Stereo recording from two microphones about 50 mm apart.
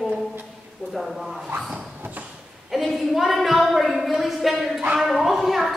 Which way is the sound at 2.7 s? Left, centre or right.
Centre.